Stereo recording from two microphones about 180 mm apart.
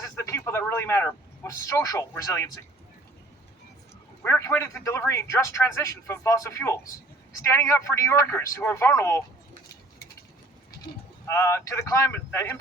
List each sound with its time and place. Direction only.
0.0 s speech: 15° left (ahead or behind)
4.2 s a man's voice: 15° left (ahead or behind)
11.3 s a man's voice: 15° left (ahead or behind)